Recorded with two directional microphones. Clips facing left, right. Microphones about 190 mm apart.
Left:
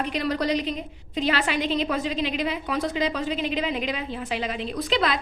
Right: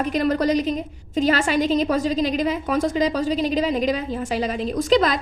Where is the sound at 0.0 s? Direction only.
45° right (ahead or behind).